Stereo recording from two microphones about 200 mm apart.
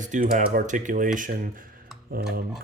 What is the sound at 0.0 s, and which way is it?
Speech, 40° right (ahead or behind).